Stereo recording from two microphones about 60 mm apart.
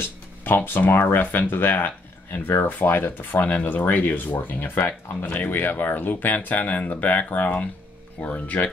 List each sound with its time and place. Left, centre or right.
0.4 s speech: left
5.2 s speech: left
5.5 s speech: left